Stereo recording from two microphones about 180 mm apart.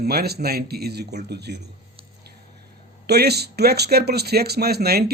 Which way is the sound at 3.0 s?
65° right (ahead or behind).